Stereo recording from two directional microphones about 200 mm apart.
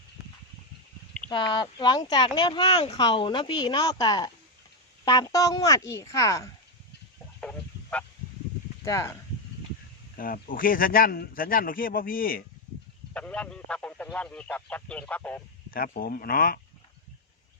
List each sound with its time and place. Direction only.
1.3 s speech: 25° left (ahead or behind)
7.4 s a sound: 5° left (ahead or behind)
8.8 s speech: 15° left (ahead or behind)
10.2 s speech: 45° left (ahead or behind)
13.1 s speech: 5° left (ahead or behind)
15.7 s speech: 45° left (ahead or behind)